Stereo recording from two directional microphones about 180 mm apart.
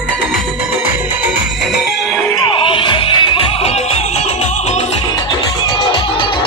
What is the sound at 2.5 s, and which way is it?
Music, 30° left (ahead or behind).